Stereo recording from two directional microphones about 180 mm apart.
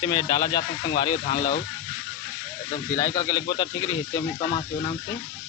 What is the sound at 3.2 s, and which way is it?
Speech, 25° left (ahead or behind).